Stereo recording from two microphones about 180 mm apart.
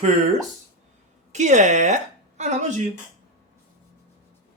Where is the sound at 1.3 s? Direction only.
40° right (ahead or behind).